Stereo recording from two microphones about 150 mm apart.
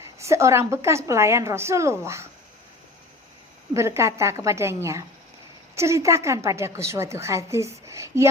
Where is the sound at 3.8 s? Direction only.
20° right (ahead or behind).